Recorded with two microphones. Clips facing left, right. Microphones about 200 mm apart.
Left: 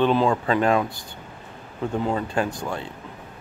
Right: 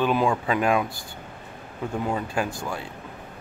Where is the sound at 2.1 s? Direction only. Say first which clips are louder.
Left 2 dB; 10° right (ahead or behind).